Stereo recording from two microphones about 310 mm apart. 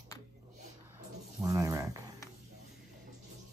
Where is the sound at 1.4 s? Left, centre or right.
Centre.